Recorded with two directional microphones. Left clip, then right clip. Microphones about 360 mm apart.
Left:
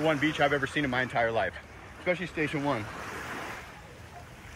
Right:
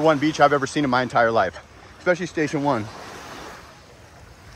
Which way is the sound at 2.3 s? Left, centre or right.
Right.